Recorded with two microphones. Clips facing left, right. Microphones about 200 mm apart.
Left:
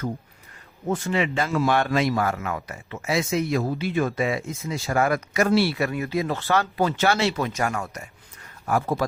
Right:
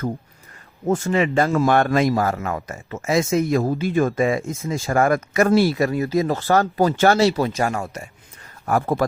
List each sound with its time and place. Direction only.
0.9 s speech: 45° right (ahead or behind)
8.6 s speech: 55° right (ahead or behind)